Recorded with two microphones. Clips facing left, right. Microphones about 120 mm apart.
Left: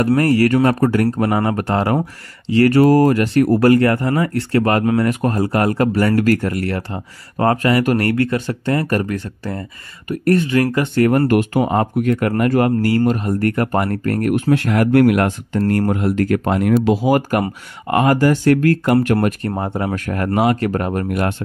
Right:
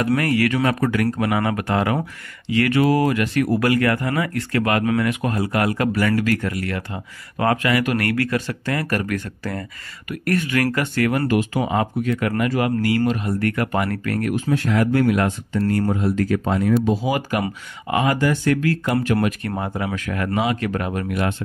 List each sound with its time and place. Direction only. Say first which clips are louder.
0.1 s speech: left 6 dB; 35° left (ahead or behind)
11.0 s speech: left 6 dB; 45° left (ahead or behind)
14.3 s speech: left 4 dB; 65° left (ahead or behind)
17.0 s speech: left 6 dB; 50° left (ahead or behind)
19.4 s speech: left 4 dB; 30° left (ahead or behind)
19.8 s speech: left 4 dB; 45° left (ahead or behind)
20.7 s speech: left 4 dB; 40° left (ahead or behind)